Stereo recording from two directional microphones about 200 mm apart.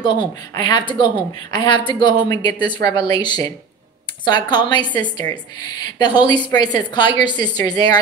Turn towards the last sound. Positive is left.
turn(degrees=20)  # may be behind; listen again after turning